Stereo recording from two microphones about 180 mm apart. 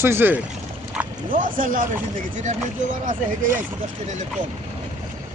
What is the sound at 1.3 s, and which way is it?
Speech, 50° right (ahead or behind).